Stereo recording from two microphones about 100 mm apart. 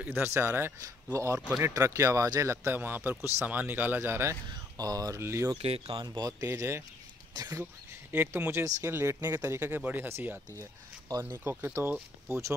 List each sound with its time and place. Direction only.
0.0 s speech: 25° right (ahead or behind)
4.7 s speech: 35° right (ahead or behind)
5.6 s speech: 90° right
5.9 s speech: 45° right (ahead or behind)
6.4 s speech: 30° right (ahead or behind)
8.1 s speech: 20° right (ahead or behind)